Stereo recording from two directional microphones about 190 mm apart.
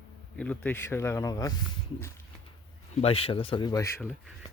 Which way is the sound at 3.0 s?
30° left (ahead or behind).